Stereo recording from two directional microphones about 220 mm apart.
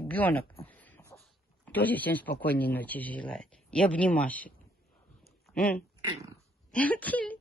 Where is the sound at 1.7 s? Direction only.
10° left (ahead or behind).